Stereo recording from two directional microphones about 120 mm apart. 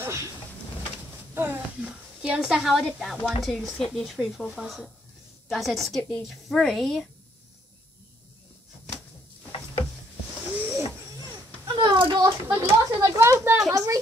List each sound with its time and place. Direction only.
0.0 s speech: 25° right (ahead or behind)
1.3 s a sound: 15° right (ahead or behind); by 3.3 s centre (ahead or behind)
3.4 s a woman's voice: centre (ahead or behind)
11.6 s child singing: 40° right (ahead or behind)
12.6 s speech: 25° right (ahead or behind)